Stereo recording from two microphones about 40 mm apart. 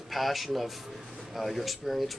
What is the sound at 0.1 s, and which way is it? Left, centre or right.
Speech, centre.